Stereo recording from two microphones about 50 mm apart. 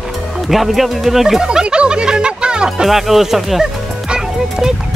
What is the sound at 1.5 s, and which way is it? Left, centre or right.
Music, centre.